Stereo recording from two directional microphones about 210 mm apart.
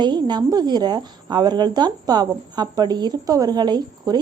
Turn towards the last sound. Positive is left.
turn(degrees=-20)  # may be behind; listen again after turning